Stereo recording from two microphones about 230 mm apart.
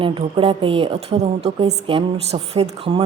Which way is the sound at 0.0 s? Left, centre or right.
Right.